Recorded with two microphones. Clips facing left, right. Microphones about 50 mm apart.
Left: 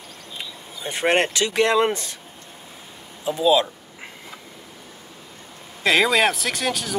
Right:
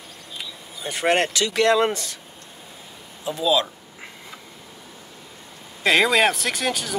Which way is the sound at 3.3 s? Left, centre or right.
Centre.